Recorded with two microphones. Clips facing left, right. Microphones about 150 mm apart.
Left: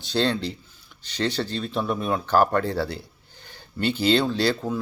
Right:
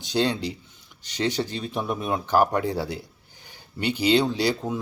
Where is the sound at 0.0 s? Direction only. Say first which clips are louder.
Even; 15° right (ahead or behind).